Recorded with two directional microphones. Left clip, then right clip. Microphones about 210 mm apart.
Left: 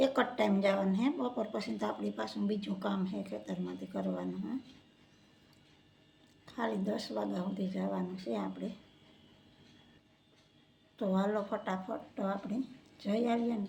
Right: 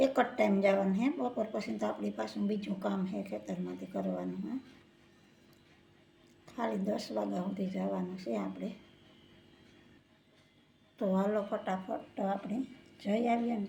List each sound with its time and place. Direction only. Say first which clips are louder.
0.0 s speech: right 1 dB; centre (ahead or behind)
6.4 s speech: right 1 dB; 5° right (ahead or behind)
10.9 s speech: right 1 dB; centre (ahead or behind)